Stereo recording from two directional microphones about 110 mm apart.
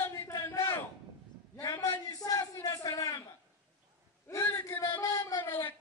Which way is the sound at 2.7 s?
35° left (ahead or behind).